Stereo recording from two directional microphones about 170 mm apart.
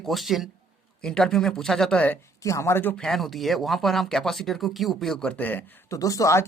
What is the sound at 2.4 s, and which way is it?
Speech, 20° left (ahead or behind).